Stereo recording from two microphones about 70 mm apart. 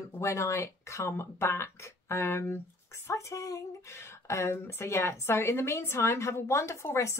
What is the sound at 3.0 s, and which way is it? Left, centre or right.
Speech, left.